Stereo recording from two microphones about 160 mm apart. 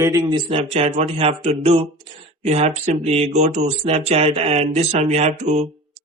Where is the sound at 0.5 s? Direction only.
40° right (ahead or behind).